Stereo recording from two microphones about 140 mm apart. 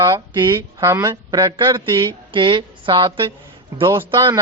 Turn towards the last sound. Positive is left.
turn(degrees=-35)  # may be behind; listen again after turning